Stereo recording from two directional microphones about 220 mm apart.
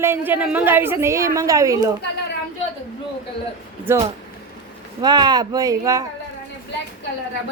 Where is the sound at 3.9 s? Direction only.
10° right (ahead or behind).